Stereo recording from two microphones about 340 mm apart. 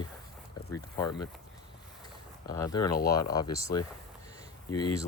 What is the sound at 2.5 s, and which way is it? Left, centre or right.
Speech, centre.